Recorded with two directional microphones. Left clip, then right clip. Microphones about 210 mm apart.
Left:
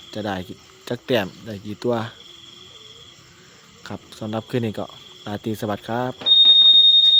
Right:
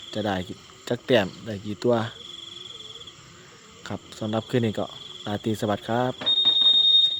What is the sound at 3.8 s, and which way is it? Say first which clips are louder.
Speech: even; 5° left (ahead or behind).